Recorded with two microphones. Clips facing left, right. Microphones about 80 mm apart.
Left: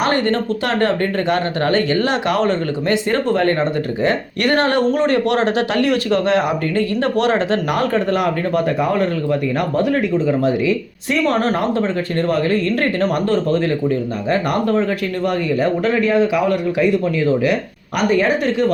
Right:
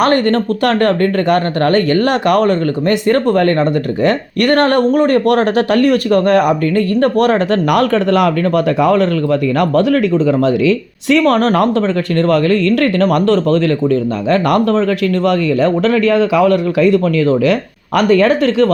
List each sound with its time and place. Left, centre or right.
0.0 s a man's voice: right